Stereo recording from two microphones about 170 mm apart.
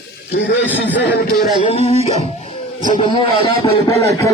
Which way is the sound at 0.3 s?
65° left (ahead or behind).